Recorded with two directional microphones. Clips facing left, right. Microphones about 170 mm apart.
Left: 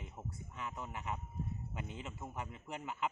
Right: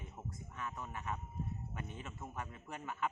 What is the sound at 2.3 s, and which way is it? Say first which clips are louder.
Speech: left 1 dB; 20° left (ahead or behind).